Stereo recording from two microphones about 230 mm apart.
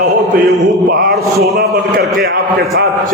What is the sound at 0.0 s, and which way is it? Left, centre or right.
Mantra, right.